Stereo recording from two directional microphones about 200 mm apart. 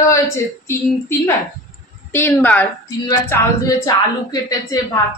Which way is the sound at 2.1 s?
10° left (ahead or behind).